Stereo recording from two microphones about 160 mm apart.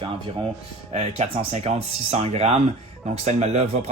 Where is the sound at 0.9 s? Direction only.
45° right (ahead or behind).